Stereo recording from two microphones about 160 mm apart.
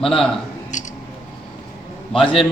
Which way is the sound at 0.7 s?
50° left (ahead or behind).